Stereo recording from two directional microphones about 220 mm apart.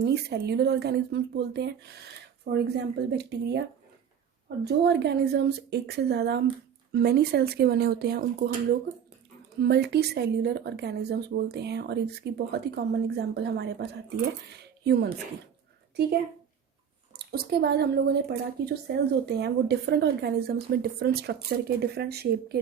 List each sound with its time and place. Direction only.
0.0 s a woman's voice: 50° right (ahead or behind)
9.6 s a woman's voice: 50° right (ahead or behind)
17.2 s a woman's voice: 45° right (ahead or behind)